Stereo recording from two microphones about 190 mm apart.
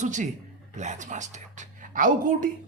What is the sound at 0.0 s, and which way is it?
A woman's voice, 40° right (ahead or behind).